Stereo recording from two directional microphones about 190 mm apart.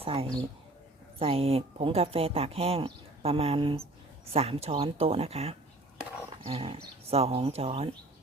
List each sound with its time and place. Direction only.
0.0 s speech: 30° right (ahead or behind)
6.3 s wild animals: 30° right (ahead or behind)
7.1 s speech: 30° right (ahead or behind)